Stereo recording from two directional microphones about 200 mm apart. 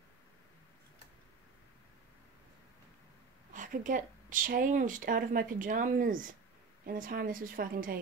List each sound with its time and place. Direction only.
3.5 s a woman's voice: 40° right (ahead or behind)